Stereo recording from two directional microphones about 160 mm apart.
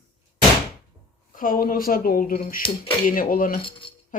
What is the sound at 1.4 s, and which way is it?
Speech, 60° left (ahead or behind).